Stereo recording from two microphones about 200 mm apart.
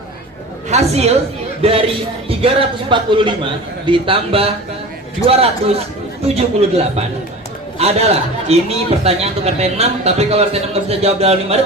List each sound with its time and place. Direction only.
0.7 s a woman's voice: 35° right (ahead or behind)